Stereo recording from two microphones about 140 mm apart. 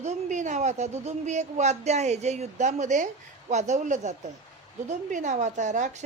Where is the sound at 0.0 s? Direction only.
55° right (ahead or behind).